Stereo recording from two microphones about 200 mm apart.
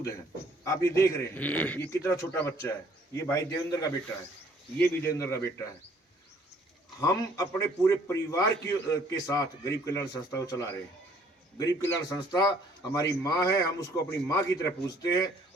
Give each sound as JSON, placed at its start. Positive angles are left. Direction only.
{"t": 0.6, "sound": "a man's voice", "side_deg": 15}
{"t": 7.3, "sound": "a man's voice", "side_deg": 15}